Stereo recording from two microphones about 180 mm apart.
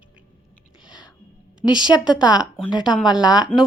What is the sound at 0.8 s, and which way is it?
Music, 5° right (ahead or behind).